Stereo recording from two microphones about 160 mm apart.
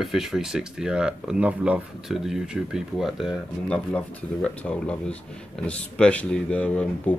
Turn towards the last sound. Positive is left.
turn(degrees=10)  # may be behind; listen again after turning